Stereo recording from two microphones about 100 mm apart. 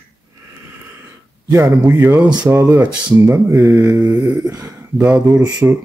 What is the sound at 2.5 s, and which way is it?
Mantra, 25° right (ahead or behind).